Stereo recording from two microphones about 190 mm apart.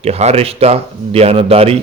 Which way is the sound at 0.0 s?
35° right (ahead or behind).